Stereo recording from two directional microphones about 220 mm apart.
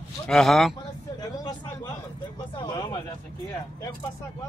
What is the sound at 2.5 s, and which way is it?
Speech, 20° left (ahead or behind).